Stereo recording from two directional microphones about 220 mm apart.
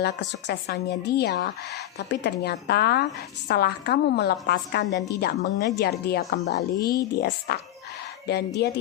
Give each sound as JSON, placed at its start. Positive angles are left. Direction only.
{"t": 0.0, "sound": "a woman's voice", "side_deg": 50}
{"t": 8.6, "sound": "a woman's voice", "side_deg": 50}